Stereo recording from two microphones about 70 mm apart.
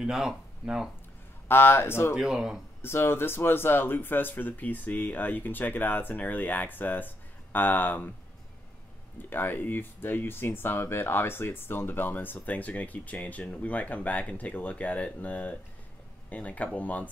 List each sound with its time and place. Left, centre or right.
0.0 s speech: centre
1.5 s speech: left
2.1 s speech: centre
2.8 s speech: left
9.3 s speech: left